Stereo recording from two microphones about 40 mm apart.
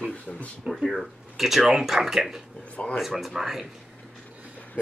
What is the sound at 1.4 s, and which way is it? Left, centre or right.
Speech, centre.